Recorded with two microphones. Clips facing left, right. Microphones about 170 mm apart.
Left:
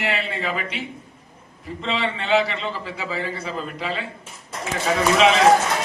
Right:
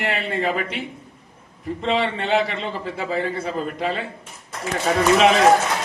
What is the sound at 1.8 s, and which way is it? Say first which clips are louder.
A man's voice: right 3 dB; 50° right (ahead or behind).